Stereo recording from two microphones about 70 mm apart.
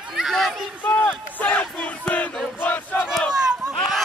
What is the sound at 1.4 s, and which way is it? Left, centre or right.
Battle cry, centre.